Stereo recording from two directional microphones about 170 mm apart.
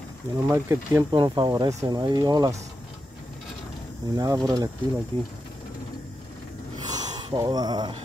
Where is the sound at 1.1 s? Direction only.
25° right (ahead or behind).